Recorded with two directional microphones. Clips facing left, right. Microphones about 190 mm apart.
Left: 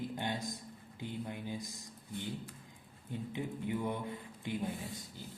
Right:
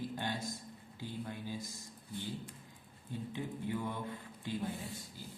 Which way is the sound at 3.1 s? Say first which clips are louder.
Left 1 dB; 15° left (ahead or behind).